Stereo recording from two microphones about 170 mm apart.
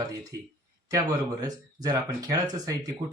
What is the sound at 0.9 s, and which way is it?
Speech, 20° right (ahead or behind).